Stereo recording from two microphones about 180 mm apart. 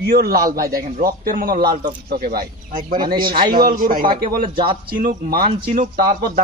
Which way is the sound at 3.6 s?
50° right (ahead or behind).